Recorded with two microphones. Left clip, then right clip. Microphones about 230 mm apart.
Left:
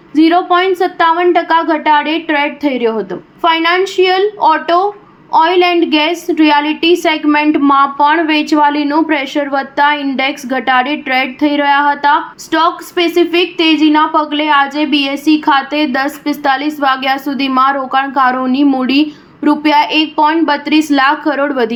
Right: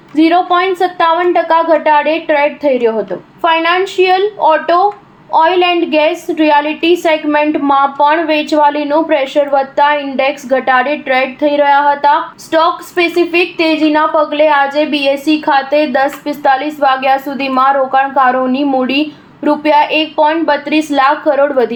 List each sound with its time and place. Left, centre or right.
0.2 s a woman's voice: left